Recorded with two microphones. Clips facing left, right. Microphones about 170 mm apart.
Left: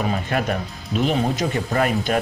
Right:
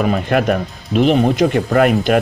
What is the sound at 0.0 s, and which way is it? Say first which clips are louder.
Speech: right 7 dB; 60° right (ahead or behind).